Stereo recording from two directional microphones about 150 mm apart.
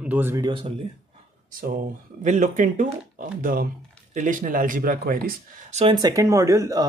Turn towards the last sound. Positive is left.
turn(degrees=-20)  # may be behind; listen again after turning